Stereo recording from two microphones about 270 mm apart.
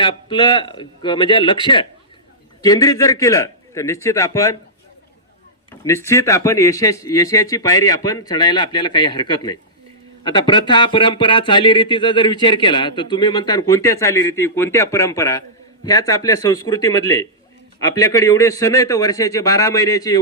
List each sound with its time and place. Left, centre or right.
0.0 s speech: centre
5.8 s speech: centre